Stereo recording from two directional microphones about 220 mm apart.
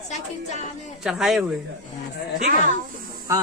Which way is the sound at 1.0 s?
Centre (ahead or behind).